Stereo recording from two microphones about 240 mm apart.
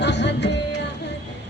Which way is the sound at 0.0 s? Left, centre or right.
Left.